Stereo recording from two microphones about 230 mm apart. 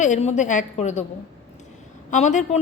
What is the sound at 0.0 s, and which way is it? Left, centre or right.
A woman's voice, left.